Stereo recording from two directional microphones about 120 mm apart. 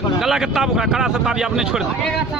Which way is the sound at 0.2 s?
5° right (ahead or behind).